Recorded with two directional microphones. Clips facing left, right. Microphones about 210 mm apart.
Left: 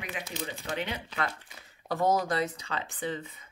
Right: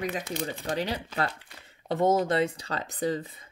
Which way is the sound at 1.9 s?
25° right (ahead or behind).